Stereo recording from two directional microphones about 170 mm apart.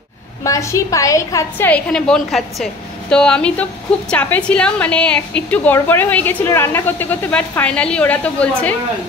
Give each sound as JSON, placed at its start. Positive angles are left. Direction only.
{"t": 0.4, "sound": "a woman's voice", "side_deg": 15}
{"t": 1.7, "sound": "a woman's voice", "side_deg": 5}